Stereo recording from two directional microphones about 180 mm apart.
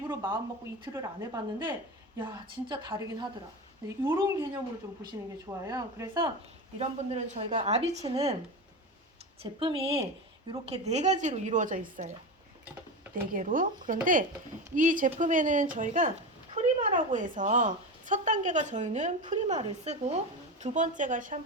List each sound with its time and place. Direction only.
0.1 s a woman's voice: 20° right (ahead or behind)
5.5 s a woman's voice: 20° right (ahead or behind)
6.7 s speech: 35° right (ahead or behind)
9.4 s a woman's voice: 30° right (ahead or behind)
13.3 s a woman's voice: 45° right (ahead or behind)